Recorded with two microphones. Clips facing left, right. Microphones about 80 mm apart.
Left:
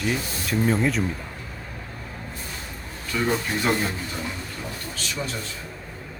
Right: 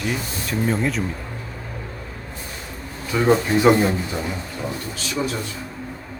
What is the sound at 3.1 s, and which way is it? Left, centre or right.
A man's voice, centre.